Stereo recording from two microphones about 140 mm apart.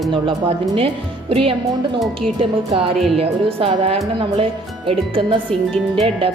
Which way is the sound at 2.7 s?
40° right (ahead or behind).